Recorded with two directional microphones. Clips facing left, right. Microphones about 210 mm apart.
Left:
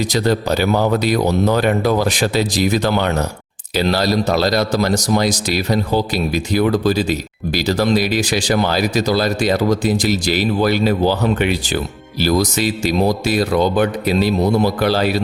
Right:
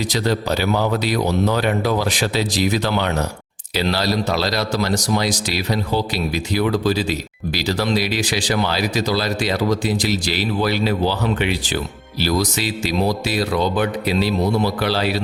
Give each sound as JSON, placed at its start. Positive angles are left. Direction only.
{"t": 0.1, "sound": "a man's voice", "side_deg": 45}